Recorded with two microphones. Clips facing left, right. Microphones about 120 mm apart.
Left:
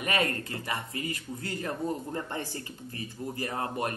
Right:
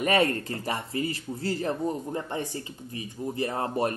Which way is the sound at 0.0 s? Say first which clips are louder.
Right 6 dB; 35° right (ahead or behind).